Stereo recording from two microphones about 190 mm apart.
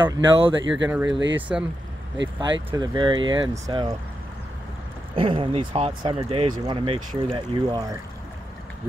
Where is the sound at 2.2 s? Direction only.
70° right (ahead or behind).